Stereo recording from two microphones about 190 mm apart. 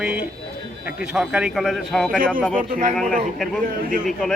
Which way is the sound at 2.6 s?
45° right (ahead or behind).